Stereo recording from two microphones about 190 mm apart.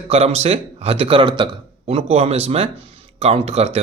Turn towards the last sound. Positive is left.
turn(degrees=-35)  # may be behind; listen again after turning